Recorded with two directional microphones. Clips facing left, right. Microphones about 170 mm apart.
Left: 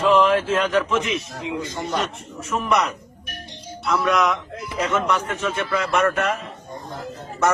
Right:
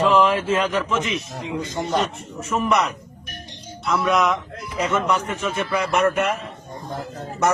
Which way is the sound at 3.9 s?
5° right (ahead or behind).